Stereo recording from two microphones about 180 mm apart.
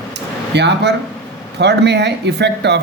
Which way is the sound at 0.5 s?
70° right (ahead or behind).